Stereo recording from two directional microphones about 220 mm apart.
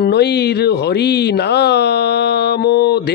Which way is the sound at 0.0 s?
50° left (ahead or behind).